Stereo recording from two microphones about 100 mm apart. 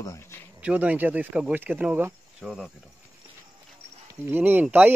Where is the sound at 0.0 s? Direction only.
30° left (ahead or behind).